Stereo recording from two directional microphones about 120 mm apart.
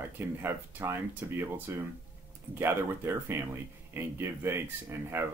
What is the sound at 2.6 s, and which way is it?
Speech, 20° right (ahead or behind).